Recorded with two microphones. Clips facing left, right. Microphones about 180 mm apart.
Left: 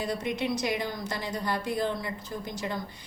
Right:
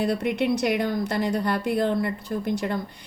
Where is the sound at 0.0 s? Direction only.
60° right (ahead or behind).